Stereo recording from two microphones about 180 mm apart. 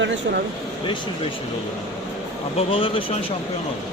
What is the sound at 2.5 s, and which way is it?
Speech, 30° left (ahead or behind).